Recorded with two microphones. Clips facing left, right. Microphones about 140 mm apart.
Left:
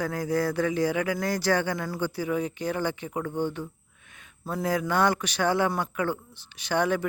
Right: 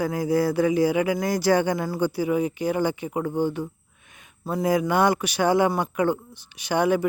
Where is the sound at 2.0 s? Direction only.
10° right (ahead or behind).